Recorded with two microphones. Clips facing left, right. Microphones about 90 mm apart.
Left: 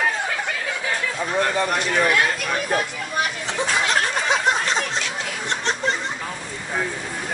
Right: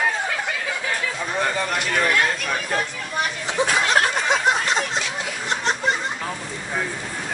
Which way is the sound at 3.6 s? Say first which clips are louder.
Right 2 dB; centre (ahead or behind).